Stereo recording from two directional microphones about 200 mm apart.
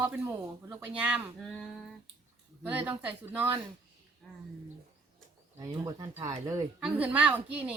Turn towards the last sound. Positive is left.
turn(degrees=-5)  # may be behind; listen again after turning